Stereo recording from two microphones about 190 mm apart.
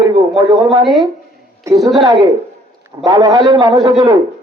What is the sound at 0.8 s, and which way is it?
Speech, centre (ahead or behind).